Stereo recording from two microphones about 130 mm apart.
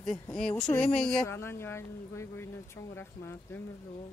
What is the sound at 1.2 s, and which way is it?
Speech, 20° left (ahead or behind).